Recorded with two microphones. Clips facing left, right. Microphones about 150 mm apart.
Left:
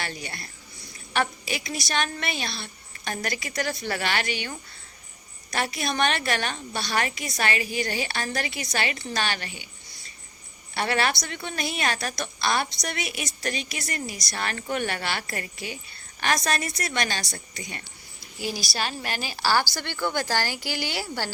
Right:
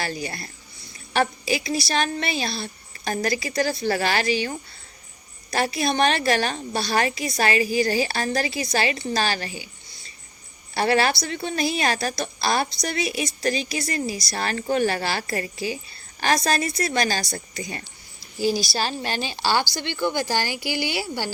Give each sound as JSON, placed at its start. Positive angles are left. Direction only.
{"t": 0.0, "sound": "a woman's voice", "side_deg": -35}
{"t": 10.8, "sound": "a woman's voice", "side_deg": -35}